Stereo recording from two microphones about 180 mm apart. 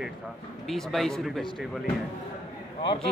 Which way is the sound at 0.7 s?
Centre (ahead or behind).